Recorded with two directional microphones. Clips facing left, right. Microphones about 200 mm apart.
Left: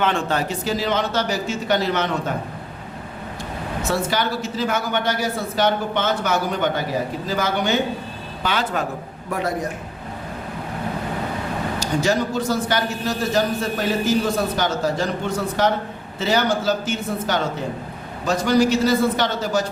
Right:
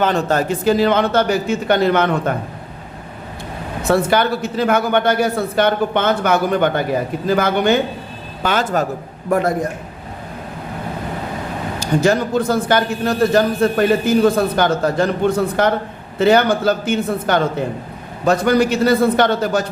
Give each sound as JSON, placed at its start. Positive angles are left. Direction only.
{"t": 0.0, "sound": "a man's voice", "side_deg": -40}
{"t": 3.8, "sound": "a man's voice", "side_deg": -55}
{"t": 8.4, "sound": "a man's voice", "side_deg": -45}
{"t": 11.8, "sound": "a man's voice", "side_deg": -55}